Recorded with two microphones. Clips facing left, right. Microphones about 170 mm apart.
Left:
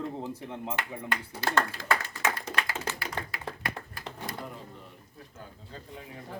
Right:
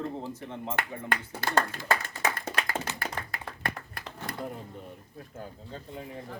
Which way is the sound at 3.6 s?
55° right (ahead or behind).